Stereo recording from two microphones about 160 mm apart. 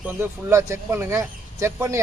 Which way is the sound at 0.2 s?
15° right (ahead or behind).